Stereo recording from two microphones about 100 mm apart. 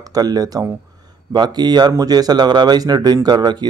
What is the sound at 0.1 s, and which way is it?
Speech, 40° right (ahead or behind).